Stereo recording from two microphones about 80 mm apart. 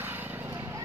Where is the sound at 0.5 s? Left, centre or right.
Right.